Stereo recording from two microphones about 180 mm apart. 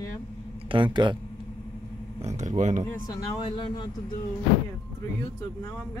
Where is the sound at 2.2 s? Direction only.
40° right (ahead or behind).